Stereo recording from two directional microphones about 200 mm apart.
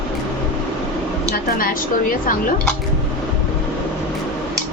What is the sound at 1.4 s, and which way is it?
Speech, 45° left (ahead or behind).